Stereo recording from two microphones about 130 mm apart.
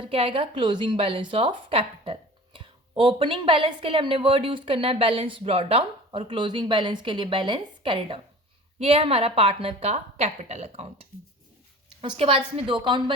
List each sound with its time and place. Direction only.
0.0 s a woman's voice: 45° right (ahead or behind)
12.0 s a woman's voice: 45° right (ahead or behind)